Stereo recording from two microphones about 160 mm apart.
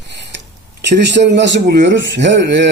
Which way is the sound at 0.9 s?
90° right.